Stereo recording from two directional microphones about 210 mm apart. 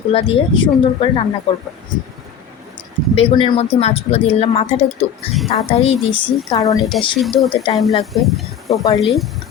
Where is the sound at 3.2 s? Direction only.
25° left (ahead or behind).